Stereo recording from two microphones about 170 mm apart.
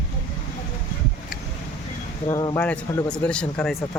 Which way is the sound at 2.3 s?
20° left (ahead or behind).